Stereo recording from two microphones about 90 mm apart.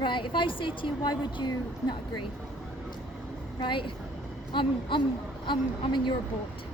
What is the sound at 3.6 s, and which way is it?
A woman's voice, 65° left (ahead or behind).